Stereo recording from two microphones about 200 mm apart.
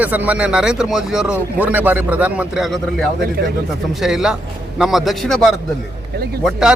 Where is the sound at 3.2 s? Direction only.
50° right (ahead or behind).